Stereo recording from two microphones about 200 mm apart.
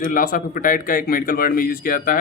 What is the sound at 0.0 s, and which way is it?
Speech, 45° left (ahead or behind).